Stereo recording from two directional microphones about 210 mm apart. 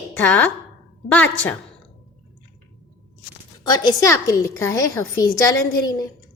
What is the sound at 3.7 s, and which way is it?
A woman's voice, 20° left (ahead or behind).